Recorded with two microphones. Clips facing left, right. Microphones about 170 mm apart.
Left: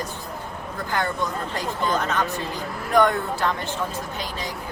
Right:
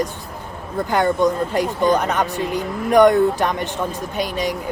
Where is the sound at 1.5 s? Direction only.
15° right (ahead or behind).